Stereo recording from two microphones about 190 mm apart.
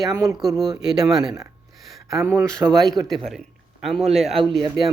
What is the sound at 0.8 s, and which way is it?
A man's voice, centre (ahead or behind).